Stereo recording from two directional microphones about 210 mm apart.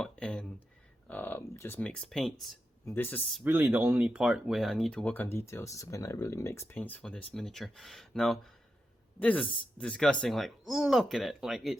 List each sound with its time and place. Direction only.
0.0 s a sound: 5° left (ahead or behind)
1.0 s speech: 10° left (ahead or behind)
3.4 s speech: 10° right (ahead or behind)